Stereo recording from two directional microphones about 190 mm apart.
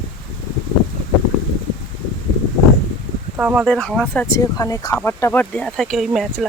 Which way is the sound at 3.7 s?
5° left (ahead or behind).